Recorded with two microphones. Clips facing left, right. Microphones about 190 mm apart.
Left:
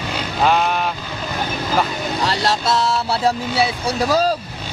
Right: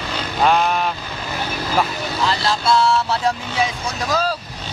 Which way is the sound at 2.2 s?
40° left (ahead or behind).